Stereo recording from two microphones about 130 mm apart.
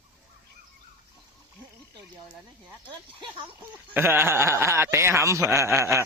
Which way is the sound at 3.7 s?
15° right (ahead or behind).